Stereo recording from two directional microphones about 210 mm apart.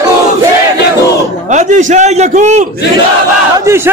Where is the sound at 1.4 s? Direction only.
35° right (ahead or behind).